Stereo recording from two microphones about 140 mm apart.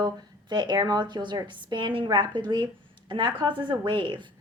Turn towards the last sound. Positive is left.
turn(degrees=-35)  # may be behind; listen again after turning